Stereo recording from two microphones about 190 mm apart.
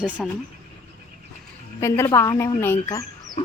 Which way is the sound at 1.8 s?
15° left (ahead or behind).